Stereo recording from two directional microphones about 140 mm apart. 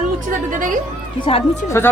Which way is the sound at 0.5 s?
70° right (ahead or behind).